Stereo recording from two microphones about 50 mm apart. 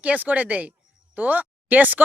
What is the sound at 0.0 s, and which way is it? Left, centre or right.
Speech, right.